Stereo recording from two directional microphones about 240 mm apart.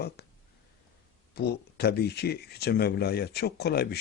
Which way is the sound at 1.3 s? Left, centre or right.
Left.